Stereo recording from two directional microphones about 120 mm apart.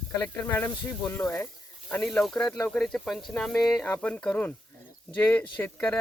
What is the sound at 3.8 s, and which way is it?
Speech, 15° left (ahead or behind).